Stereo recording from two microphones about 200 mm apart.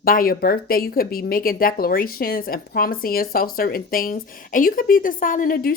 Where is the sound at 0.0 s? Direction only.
45° left (ahead or behind).